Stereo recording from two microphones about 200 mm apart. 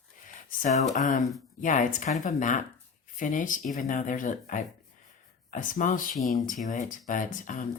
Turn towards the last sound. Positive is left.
turn(degrees=40)  # may be behind; listen again after turning